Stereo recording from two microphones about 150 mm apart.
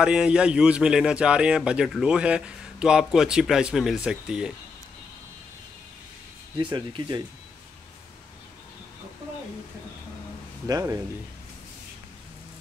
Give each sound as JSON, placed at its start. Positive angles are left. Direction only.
{"t": 0.0, "sound": "a man's voice", "side_deg": -5}
{"t": 6.6, "sound": "speech", "side_deg": -35}
{"t": 10.7, "sound": "speech", "side_deg": -25}